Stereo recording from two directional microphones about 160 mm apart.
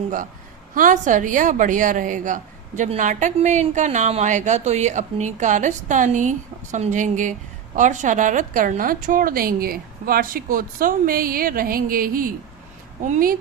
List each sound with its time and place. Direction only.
0.7 s a woman's voice: 55° right (ahead or behind)